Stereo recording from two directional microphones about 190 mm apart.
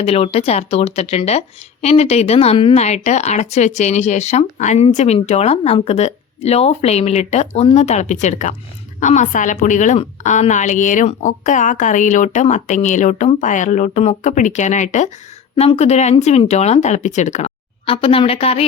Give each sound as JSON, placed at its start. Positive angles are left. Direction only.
{"t": 0.0, "sound": "speech", "side_deg": 30}